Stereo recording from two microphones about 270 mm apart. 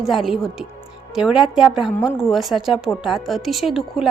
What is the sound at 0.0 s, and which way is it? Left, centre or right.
A woman's voice, centre.